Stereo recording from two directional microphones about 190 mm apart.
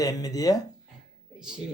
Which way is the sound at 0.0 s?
20° left (ahead or behind).